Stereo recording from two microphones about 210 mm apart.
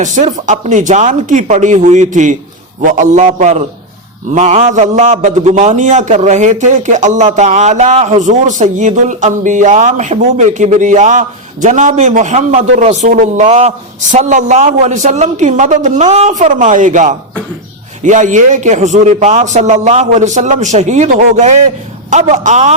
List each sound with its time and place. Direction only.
0.0 s a man's voice: 35° right (ahead or behind)